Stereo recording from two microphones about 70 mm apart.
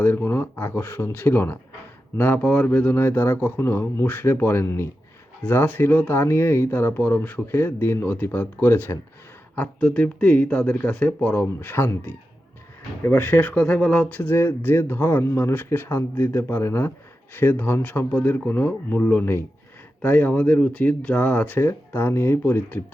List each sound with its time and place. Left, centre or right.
0.0 s speech: left
2.9 s speech: left
9.8 s speech: centre
21.6 s speech: left